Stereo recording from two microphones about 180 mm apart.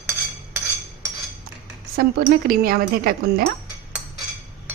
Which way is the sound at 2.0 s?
55° right (ahead or behind).